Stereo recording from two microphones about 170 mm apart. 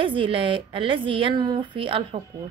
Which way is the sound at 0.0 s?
30° right (ahead or behind).